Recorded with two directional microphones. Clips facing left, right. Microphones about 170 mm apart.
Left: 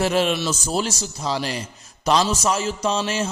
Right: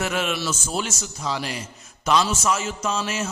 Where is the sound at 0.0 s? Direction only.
30° left (ahead or behind).